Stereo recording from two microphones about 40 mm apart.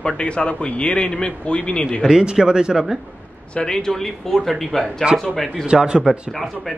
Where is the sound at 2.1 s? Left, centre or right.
Centre.